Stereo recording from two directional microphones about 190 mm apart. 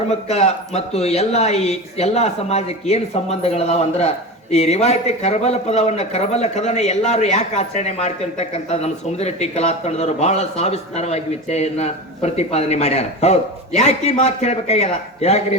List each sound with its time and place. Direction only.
0.1 s speech: 35° left (ahead or behind)